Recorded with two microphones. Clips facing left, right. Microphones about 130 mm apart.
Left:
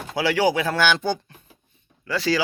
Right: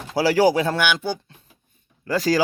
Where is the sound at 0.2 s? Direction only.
40° right (ahead or behind).